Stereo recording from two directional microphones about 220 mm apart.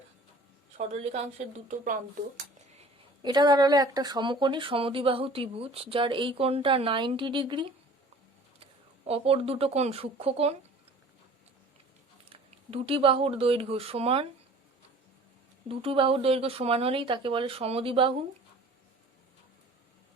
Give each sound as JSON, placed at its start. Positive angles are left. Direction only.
{"t": 1.6, "sound": "speech", "side_deg": -35}
{"t": 2.7, "sound": "speech", "side_deg": -20}
{"t": 9.0, "sound": "speech", "side_deg": -25}
{"t": 12.3, "sound": "speech", "side_deg": -25}
{"t": 15.8, "sound": "speech", "side_deg": -25}